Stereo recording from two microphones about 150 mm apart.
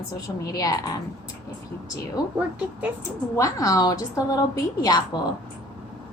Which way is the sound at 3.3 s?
20° left (ahead or behind).